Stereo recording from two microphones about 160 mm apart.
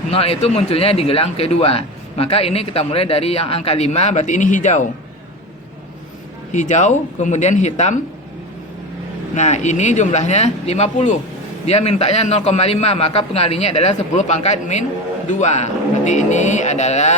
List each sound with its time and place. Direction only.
0.1 s speech: 40° left (ahead or behind)
6.5 s speech: 50° left (ahead or behind)
9.3 s speech: 45° left (ahead or behind)